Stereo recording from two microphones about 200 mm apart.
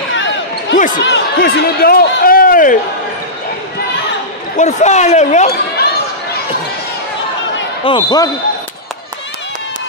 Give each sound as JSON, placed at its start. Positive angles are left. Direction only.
{"t": 0.1, "sound": "basketball bounce", "side_deg": 65}
{"t": 0.9, "sound": "speech", "side_deg": 60}
{"t": 4.6, "sound": "speech", "side_deg": 35}
{"t": 5.5, "sound": "a sound", "side_deg": 50}
{"t": 7.8, "sound": "speech", "side_deg": 20}